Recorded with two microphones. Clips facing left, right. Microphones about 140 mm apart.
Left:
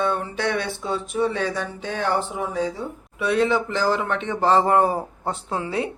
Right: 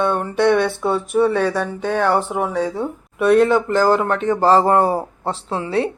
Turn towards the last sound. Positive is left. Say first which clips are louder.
# right 5 dB
turn(degrees=-30)  # may be behind; listen again after turning